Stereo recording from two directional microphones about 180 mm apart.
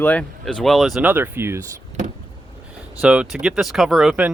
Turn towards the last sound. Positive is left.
turn(degrees=-5)  # may be behind; listen again after turning